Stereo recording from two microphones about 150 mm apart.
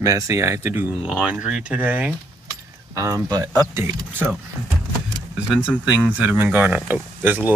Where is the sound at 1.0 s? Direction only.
5° right (ahead or behind).